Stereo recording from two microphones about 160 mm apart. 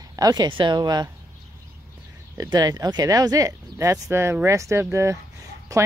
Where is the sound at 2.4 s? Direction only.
25° right (ahead or behind).